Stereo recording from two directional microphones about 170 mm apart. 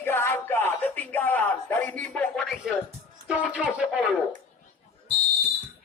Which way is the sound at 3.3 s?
5° right (ahead or behind).